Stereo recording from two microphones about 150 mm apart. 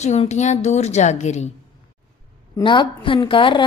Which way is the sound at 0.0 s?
50° left (ahead or behind).